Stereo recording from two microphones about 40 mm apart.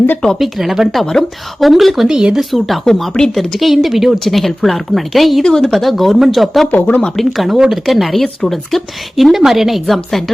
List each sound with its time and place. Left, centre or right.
0.3 s speech: centre
0.9 s speech: centre
2.0 s speech: centre
2.4 s speech: centre
5.4 s speech: centre
5.7 s speech: centre
6.7 s speech: left
7.2 s speech: centre